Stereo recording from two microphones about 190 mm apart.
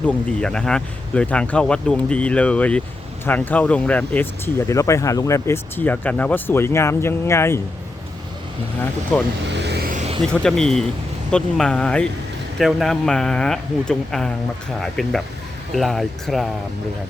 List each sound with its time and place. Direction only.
0.3 s speech: 5° left (ahead or behind)
9.1 s speech: 5° left (ahead or behind)
9.5 s vehicle: 65° right (ahead or behind)
10.3 s speech: 5° left (ahead or behind)